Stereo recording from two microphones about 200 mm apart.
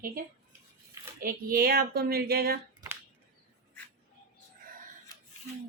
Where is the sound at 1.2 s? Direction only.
45° right (ahead or behind).